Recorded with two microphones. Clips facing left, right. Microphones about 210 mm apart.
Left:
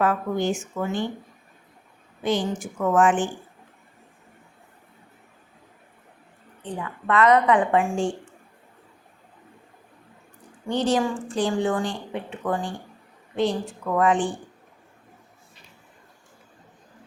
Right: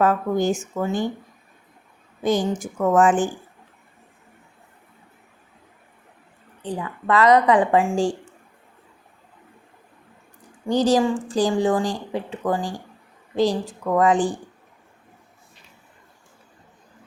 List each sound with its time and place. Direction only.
0.0 s speech: 40° right (ahead or behind)
2.2 s speech: 45° right (ahead or behind)
6.6 s a woman's voice: 35° right (ahead or behind)
10.7 s a woman's voice: 40° right (ahead or behind)